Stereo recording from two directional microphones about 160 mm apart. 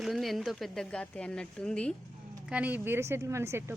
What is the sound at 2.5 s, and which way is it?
A woman's voice, 10° right (ahead or behind).